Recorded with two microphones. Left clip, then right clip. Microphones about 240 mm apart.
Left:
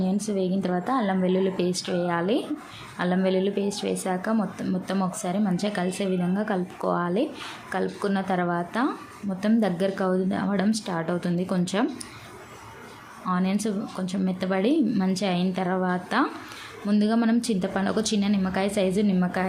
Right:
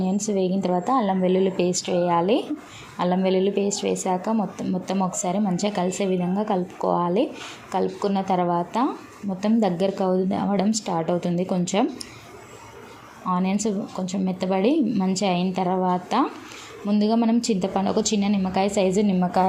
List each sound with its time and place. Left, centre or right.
0.0 s a woman's voice: centre
13.3 s a woman's voice: centre